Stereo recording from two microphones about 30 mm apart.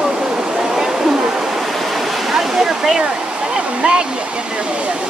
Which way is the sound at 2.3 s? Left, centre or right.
Centre.